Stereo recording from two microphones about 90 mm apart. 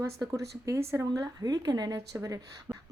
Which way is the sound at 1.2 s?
45° right (ahead or behind).